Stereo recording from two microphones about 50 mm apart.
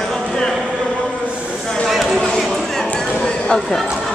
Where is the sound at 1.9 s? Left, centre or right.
Centre.